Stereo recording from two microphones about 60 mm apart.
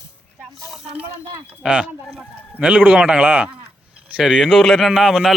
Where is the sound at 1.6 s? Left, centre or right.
Right.